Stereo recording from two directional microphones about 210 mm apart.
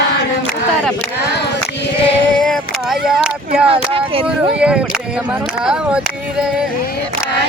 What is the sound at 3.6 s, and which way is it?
Speech, 25° right (ahead or behind).